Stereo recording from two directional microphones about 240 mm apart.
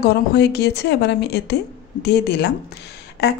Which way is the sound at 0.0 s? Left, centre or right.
Left.